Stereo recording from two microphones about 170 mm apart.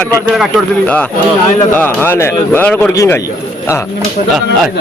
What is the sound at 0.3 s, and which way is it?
A man's voice, 5° left (ahead or behind).